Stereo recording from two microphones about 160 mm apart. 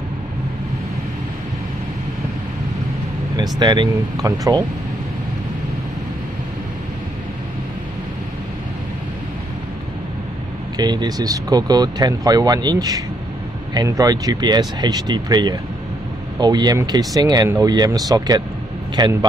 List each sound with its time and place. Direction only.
3.5 s speech: 25° right (ahead or behind)
10.8 s speech: 25° right (ahead or behind)